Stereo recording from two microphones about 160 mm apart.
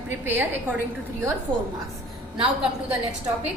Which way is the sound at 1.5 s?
30° right (ahead or behind).